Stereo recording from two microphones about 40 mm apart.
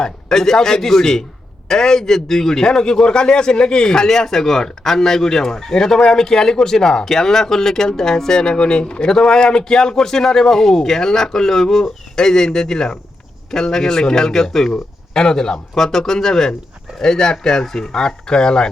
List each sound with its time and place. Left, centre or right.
0.0 s a man's voice: centre